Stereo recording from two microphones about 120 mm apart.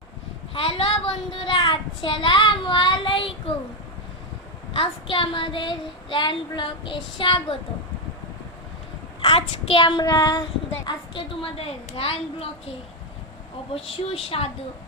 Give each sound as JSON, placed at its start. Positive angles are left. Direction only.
{"t": 0.5, "sound": "a child's voice", "side_deg": 50}
{"t": 4.7, "sound": "a woman's voice", "side_deg": 45}
{"t": 9.2, "sound": "a woman's voice", "side_deg": 50}
{"t": 10.1, "sound": "child singing", "side_deg": 30}
{"t": 10.8, "sound": "a woman's voice", "side_deg": 45}
{"t": 13.7, "sound": "a woman's voice", "side_deg": 55}